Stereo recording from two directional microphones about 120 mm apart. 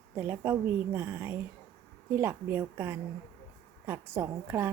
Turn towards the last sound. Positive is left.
turn(degrees=-20)  # may be behind; listen again after turning